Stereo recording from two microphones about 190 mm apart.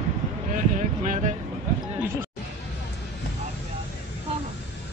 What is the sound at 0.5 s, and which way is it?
Speech, 40° right (ahead or behind).